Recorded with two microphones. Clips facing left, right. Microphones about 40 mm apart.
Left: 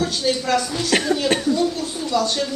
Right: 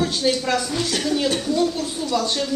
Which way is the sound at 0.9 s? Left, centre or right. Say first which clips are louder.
Left 10 dB; left.